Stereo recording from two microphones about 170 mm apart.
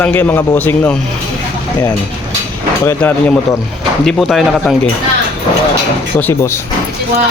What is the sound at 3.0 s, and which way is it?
Speech, 10° left (ahead or behind).